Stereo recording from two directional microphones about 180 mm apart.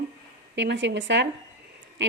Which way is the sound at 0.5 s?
80° right.